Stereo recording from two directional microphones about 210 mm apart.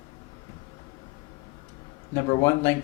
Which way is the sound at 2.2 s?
15° left (ahead or behind).